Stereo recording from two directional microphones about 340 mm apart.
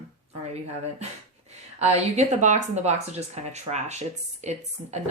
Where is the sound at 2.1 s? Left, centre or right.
Right.